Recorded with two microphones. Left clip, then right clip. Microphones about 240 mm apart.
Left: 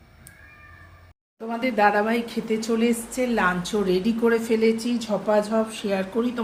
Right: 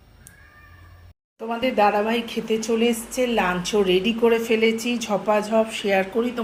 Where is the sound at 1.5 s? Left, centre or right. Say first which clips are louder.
Right 1 dB; centre.